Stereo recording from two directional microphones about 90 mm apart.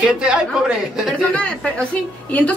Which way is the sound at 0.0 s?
10° right (ahead or behind).